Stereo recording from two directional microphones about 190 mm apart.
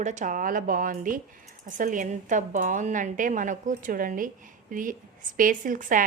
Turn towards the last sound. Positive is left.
turn(degrees=-45)  # may be behind; listen again after turning